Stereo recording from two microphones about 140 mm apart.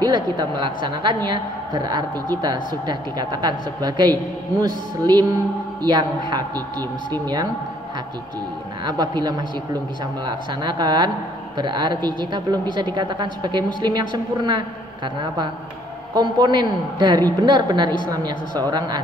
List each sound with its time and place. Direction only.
0.0 s a woman's voice: 30° right (ahead or behind)
8.8 s a woman's voice: 30° right (ahead or behind)